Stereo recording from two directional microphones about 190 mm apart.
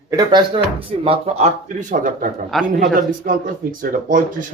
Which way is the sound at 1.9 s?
45° right (ahead or behind).